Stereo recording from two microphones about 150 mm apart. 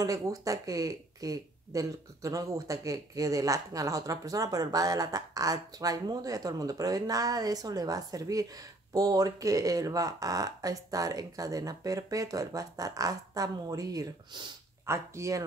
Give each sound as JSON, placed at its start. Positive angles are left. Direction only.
{"t": 0.0, "sound": "speech", "side_deg": -25}